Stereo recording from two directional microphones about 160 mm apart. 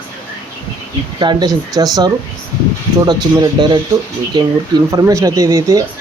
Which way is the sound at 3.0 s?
25° right (ahead or behind).